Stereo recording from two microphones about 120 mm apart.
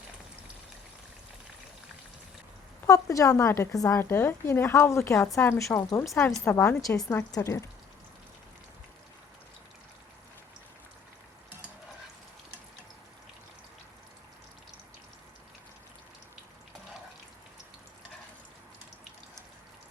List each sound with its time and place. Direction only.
2.8 s a woman's voice: 25° left (ahead or behind)